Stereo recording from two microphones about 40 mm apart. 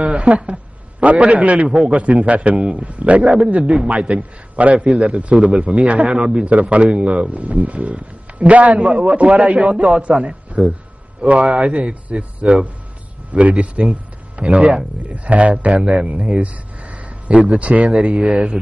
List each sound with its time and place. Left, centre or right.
0.3 s speech: centre
1.1 s a man's voice: right
4.7 s a man's voice: right
5.1 s a man's voice: right
14.3 s a sound: right
15.0 s a man's voice: right